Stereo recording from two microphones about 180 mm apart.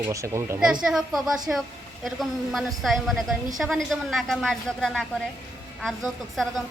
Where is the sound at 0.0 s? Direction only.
15° right (ahead or behind).